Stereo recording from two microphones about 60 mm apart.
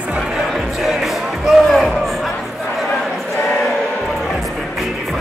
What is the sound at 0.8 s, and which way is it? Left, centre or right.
Music, centre.